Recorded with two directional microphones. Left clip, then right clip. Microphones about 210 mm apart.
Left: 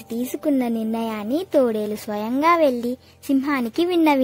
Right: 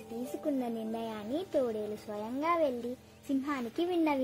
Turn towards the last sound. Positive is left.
turn(degrees=45)  # may be behind; listen again after turning